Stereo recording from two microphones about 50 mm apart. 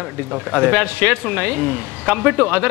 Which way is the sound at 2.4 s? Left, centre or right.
Right.